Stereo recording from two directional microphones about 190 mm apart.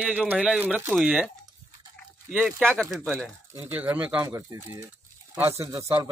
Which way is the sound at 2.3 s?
Centre (ahead or behind).